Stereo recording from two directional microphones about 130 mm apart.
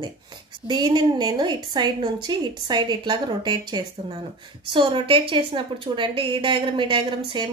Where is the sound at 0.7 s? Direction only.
35° right (ahead or behind).